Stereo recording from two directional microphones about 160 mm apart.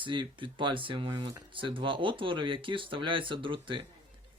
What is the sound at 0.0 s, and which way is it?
Speech, 30° right (ahead or behind).